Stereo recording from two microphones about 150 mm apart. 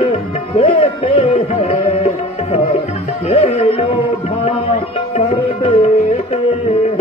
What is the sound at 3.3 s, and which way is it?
Music, 40° left (ahead or behind).